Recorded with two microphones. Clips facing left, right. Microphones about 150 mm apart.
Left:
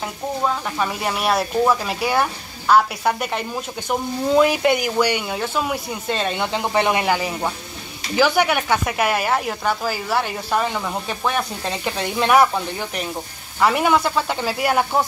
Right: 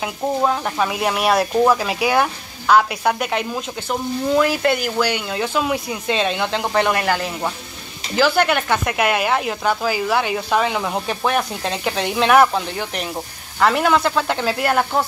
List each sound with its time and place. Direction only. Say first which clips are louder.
0.7 s speech: right 3 dB; 5° right (ahead or behind)
4.4 s speech: left 3 dB; 15° left (ahead or behind)
5.4 s speech: right 3 dB; centre (ahead or behind)
6.7 s speech: even; 15° left (ahead or behind)
7.2 s speech: even; 5° left (ahead or behind)
11.7 s speech: right 3 dB; centre (ahead or behind)
13.6 s speech: right 1 dB; 10° left (ahead or behind)